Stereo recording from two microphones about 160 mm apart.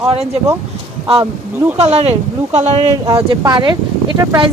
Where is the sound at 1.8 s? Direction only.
40° right (ahead or behind).